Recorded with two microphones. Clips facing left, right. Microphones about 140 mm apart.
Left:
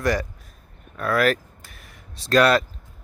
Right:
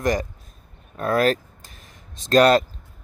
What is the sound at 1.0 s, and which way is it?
Speech, 35° right (ahead or behind).